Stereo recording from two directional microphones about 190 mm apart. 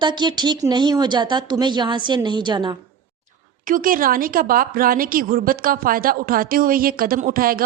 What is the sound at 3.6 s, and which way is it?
A woman's voice, 45° right (ahead or behind).